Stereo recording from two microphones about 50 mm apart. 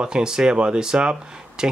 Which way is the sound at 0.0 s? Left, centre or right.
Centre.